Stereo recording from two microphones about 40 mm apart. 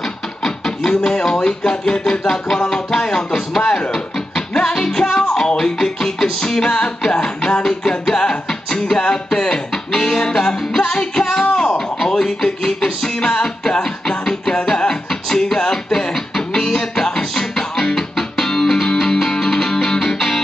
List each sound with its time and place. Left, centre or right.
0.4 s speech: centre
7.9 s music: left
12.0 s speech: centre
14.2 s music: centre